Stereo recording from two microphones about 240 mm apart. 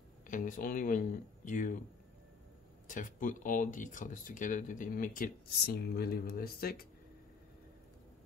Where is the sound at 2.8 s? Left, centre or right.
Left.